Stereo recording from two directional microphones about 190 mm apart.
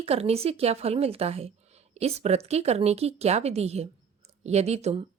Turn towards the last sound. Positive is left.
turn(degrees=-35)  # may be behind; listen again after turning